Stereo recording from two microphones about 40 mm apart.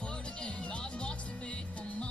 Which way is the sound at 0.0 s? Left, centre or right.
Left.